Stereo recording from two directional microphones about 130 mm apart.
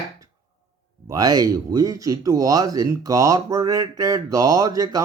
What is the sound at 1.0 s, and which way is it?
Speech, 30° right (ahead or behind).